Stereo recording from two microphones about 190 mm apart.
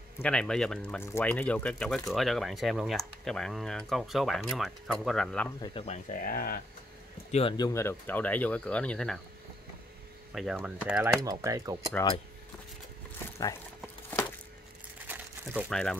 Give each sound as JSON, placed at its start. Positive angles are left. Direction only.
{"t": 0.2, "sound": "speech", "side_deg": 5}
{"t": 5.6, "sound": "speech", "side_deg": 30}
{"t": 7.2, "sound": "speech", "side_deg": 35}
{"t": 7.5, "sound": "speech", "side_deg": 20}
{"t": 10.3, "sound": "speech", "side_deg": -5}
{"t": 11.2, "sound": "speech", "side_deg": -20}
{"t": 15.0, "sound": "crumpling", "side_deg": -5}